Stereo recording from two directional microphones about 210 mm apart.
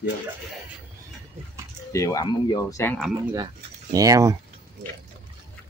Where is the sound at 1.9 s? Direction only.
15° left (ahead or behind).